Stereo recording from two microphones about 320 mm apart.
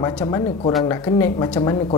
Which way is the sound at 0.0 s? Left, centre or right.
Centre.